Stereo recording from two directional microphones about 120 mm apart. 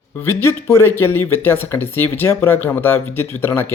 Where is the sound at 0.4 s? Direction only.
20° left (ahead or behind).